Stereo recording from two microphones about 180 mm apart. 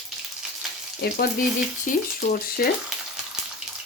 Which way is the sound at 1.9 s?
45° left (ahead or behind).